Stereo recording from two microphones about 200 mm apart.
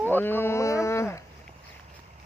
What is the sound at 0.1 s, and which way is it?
Speech, 10° left (ahead or behind).